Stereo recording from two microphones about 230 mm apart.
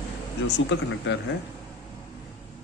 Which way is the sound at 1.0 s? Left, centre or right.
Left.